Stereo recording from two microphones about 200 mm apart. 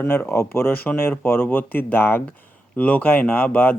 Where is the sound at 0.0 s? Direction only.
10° left (ahead or behind).